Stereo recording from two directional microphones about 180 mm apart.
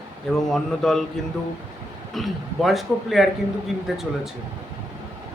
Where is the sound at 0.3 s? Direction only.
Centre (ahead or behind).